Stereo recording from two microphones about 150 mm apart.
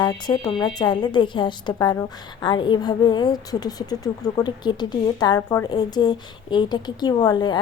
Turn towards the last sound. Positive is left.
turn(degrees=30)  # may be behind; listen again after turning